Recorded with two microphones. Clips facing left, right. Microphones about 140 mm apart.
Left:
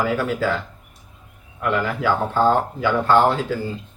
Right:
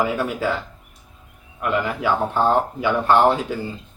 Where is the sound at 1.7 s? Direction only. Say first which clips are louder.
Even; 15° right (ahead or behind).